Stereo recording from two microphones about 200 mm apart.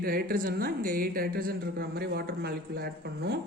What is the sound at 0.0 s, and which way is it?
A woman's voice, 50° right (ahead or behind).